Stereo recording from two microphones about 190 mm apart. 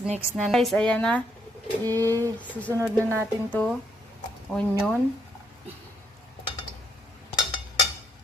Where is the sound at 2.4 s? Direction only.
10° left (ahead or behind).